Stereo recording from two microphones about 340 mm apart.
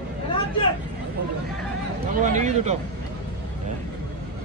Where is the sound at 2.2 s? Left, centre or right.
Right.